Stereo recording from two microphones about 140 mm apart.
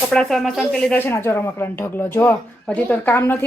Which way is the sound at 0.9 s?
15° left (ahead or behind).